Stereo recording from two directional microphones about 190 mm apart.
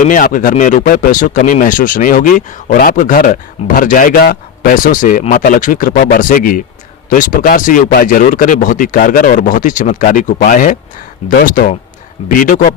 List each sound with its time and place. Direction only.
0.1 s speech: 45° left (ahead or behind)